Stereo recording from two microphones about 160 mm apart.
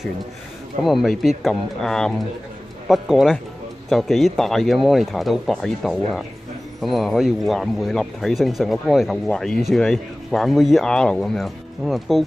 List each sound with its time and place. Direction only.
0.8 s speech: centre (ahead or behind)